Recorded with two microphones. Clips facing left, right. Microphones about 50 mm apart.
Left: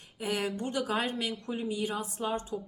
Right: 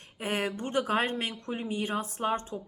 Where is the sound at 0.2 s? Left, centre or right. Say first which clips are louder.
Right 1 dB; right.